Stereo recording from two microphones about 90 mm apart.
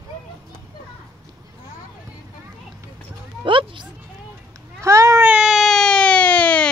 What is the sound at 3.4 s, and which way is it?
Speech, 70° right (ahead or behind).